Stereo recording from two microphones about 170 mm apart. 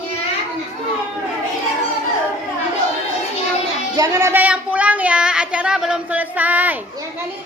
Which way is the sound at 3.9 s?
20° right (ahead or behind).